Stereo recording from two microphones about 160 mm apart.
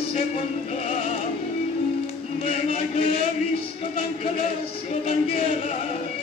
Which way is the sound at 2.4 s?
45° left (ahead or behind).